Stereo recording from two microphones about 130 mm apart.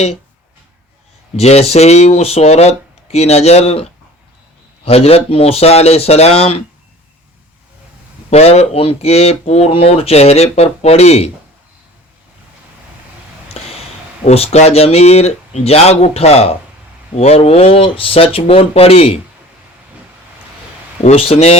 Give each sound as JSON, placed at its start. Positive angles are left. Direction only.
{"t": 1.4, "sound": "speech", "side_deg": 55}
{"t": 4.9, "sound": "speech", "side_deg": 50}
{"t": 8.3, "sound": "speech", "side_deg": 55}
{"t": 13.5, "sound": "a sound", "side_deg": 50}
{"t": 14.3, "sound": "speech", "side_deg": 50}
{"t": 21.0, "sound": "speech", "side_deg": 55}